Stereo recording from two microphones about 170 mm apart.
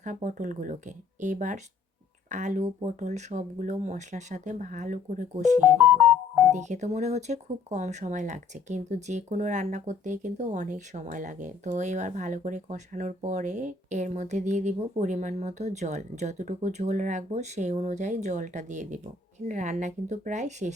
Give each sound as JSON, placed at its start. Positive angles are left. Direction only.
{"t": 0.0, "sound": "speech", "side_deg": -45}